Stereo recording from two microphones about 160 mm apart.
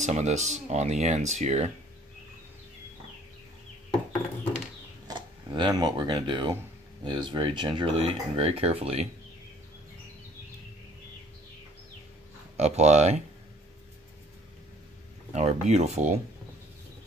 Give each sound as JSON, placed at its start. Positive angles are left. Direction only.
{"t": 0.0, "sound": "speech", "side_deg": -45}
{"t": 5.0, "sound": "speech", "side_deg": -25}
{"t": 12.5, "sound": "speech", "side_deg": -45}
{"t": 15.3, "sound": "speech", "side_deg": -45}